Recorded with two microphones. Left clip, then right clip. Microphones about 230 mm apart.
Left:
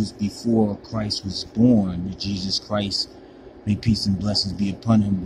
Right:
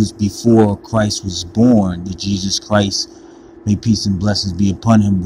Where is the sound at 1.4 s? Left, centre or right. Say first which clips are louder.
Right 6 dB; centre.